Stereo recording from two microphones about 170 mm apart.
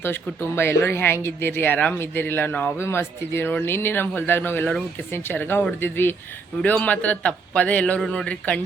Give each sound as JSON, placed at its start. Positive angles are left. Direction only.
{"t": 0.0, "sound": "speech", "side_deg": 15}